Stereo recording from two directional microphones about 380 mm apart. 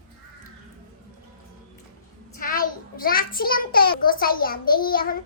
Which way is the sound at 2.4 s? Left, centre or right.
Left.